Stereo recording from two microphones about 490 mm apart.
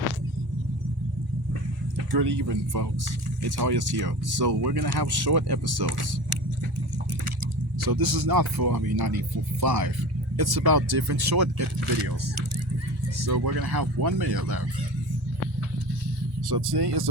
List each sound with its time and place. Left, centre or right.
2.1 s speech: right
7.9 s speech: right
11.8 s speech: right
13.2 s speech: right
16.5 s speech: right